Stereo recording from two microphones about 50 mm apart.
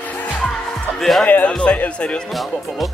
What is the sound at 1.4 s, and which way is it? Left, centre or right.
Speech, left.